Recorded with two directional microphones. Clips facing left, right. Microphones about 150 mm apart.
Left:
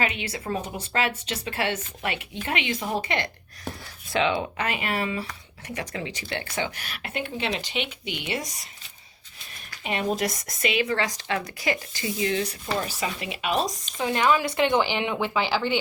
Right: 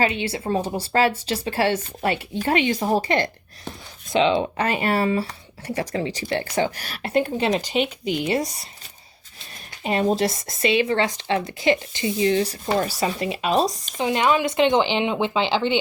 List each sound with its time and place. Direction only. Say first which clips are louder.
0.0 s speech: right 6 dB; 30° right (ahead or behind)
4.1 s speech: right 5 dB; 25° right (ahead or behind)
4.5 s speech: right 6 dB; 35° right (ahead or behind)
9.8 s speech: right 6 dB; 35° right (ahead or behind)
14.0 s speech: right 3 dB; 20° right (ahead or behind)